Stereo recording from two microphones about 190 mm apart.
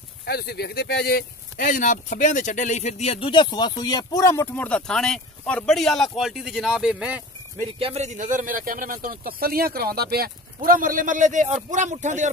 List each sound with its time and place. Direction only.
0.2 s speech: 55° left (ahead or behind); by 7.2 s 5° right (ahead or behind)
7.5 s speech: 30° right (ahead or behind)